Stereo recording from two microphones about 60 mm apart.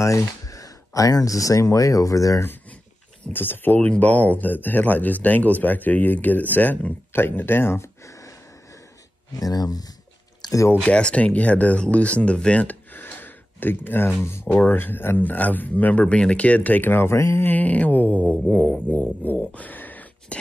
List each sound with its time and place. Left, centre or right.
0.5 s speech: left
3.3 s speech: left
8.1 s wheeze: left
9.4 s speech: left
10.8 s speech: centre; by 14.5 s left
14.5 s speech: left
16.9 s speech: left
17.5 s speech: left